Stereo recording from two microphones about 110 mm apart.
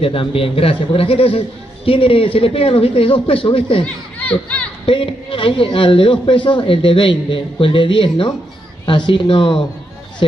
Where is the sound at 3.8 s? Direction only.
10° left (ahead or behind).